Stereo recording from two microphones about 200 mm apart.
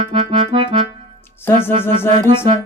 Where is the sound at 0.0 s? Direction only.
30° right (ahead or behind).